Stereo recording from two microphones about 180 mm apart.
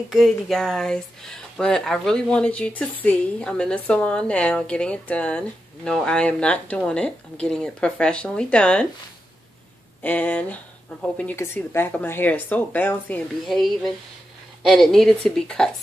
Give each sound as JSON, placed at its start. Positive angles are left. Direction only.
{"t": 0.1, "sound": "speech", "side_deg": 0}
{"t": 10.0, "sound": "speech", "side_deg": 10}